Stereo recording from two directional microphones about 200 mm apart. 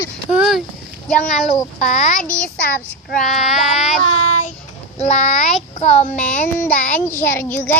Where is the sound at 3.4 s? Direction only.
Centre (ahead or behind).